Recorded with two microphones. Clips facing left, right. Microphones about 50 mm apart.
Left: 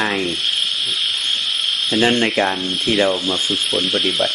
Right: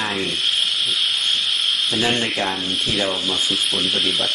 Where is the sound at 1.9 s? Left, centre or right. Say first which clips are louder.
Left 8 dB; left.